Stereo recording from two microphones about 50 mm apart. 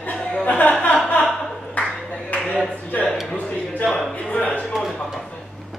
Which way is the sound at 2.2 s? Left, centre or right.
Left.